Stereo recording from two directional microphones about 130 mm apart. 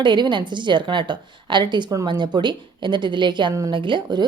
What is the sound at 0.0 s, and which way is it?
A woman's voice, 35° right (ahead or behind).